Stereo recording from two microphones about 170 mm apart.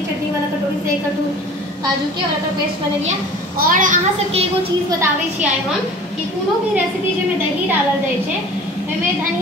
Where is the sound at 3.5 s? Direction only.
55° right (ahead or behind).